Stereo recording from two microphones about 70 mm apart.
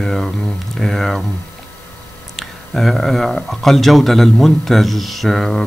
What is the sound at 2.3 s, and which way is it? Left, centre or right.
Speech, centre.